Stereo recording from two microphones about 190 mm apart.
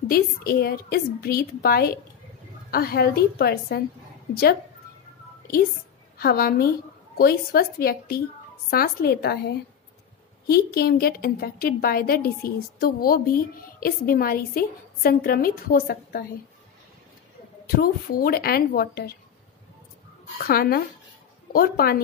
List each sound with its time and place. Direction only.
0.1 s a woman's voice: 50° left (ahead or behind)
6.1 s a woman's voice: 55° left (ahead or behind)
17.6 s a woman's voice: 50° left (ahead or behind)
20.3 s a woman's voice: 50° left (ahead or behind)